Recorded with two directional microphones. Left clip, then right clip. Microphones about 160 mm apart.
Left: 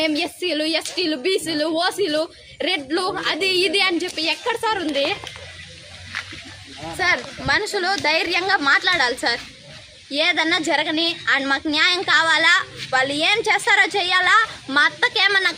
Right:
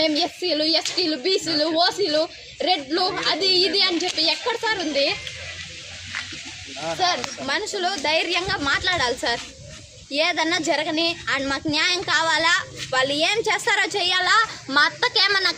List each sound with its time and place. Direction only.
0.0 s speech: 35° left (ahead or behind)
4.4 s speech: 5° left (ahead or behind)
7.0 s a woman's voice: 10° left (ahead or behind)